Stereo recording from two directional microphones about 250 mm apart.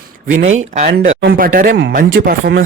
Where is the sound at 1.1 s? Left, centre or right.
Right.